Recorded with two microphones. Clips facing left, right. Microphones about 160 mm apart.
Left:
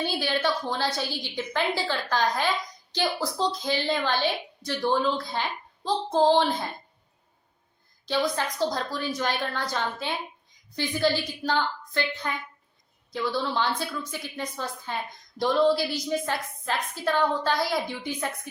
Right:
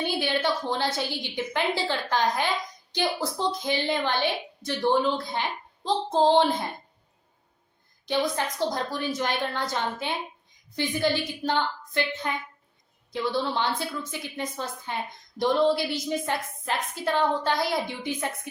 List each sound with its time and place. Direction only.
0.0 s a woman's voice: 20° right (ahead or behind)
8.0 s a woman's voice: 15° right (ahead or behind)